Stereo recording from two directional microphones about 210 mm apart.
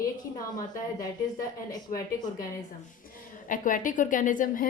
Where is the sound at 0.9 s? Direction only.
15° left (ahead or behind).